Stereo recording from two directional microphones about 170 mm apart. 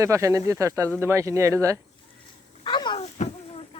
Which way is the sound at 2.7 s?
30° left (ahead or behind).